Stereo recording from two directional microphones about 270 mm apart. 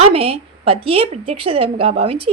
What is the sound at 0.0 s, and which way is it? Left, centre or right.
A woman's voice, right.